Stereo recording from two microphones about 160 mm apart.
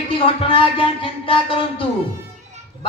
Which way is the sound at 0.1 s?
35° left (ahead or behind).